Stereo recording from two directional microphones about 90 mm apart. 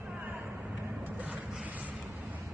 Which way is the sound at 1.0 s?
15° right (ahead or behind).